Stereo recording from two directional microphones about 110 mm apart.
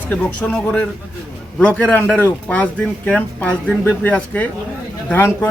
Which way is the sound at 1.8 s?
15° left (ahead or behind).